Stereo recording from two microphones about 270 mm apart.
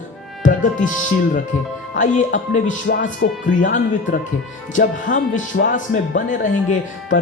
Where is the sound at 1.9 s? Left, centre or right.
Left.